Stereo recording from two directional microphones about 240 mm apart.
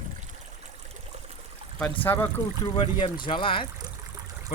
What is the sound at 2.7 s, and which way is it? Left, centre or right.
Speech, centre.